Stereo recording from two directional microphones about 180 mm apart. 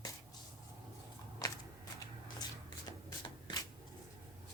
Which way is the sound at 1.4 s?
20° left (ahead or behind).